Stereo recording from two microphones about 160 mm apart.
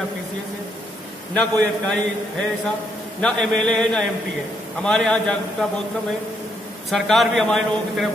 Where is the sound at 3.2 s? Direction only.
5° left (ahead or behind).